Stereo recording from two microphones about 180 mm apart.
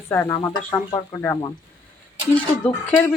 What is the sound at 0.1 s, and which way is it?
Speech, 15° left (ahead or behind).